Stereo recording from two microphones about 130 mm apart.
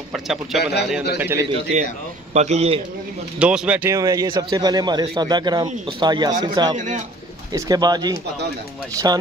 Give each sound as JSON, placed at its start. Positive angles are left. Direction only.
{"t": 0.1, "sound": "speech", "side_deg": 0}
{"t": 1.2, "sound": "speech", "side_deg": -20}
{"t": 1.5, "sound": "a man's voice", "side_deg": -60}
{"t": 3.3, "sound": "a man's voice", "side_deg": -10}
{"t": 3.9, "sound": "a man's voice", "side_deg": -25}